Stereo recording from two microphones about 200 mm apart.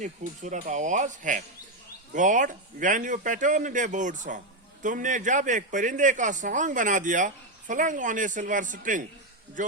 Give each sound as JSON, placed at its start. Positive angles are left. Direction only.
{"t": 0.0, "sound": "a man's voice", "side_deg": -35}